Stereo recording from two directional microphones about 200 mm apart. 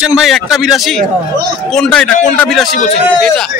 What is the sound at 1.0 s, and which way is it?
Speech, 50° right (ahead or behind).